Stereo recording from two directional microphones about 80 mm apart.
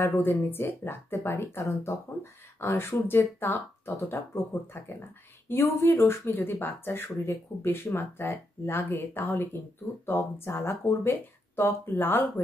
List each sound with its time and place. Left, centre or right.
0.0 s speech: left
5.5 s speech: left